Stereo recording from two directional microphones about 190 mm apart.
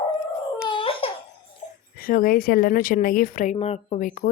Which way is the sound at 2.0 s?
50° left (ahead or behind).